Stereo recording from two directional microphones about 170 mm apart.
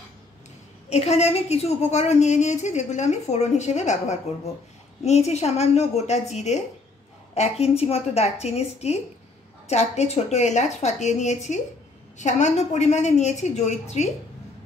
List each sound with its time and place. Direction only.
0.8 s a woman's voice: 40° left (ahead or behind)